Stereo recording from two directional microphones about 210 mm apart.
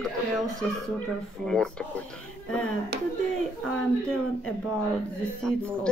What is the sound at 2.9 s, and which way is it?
Speech, 50° right (ahead or behind).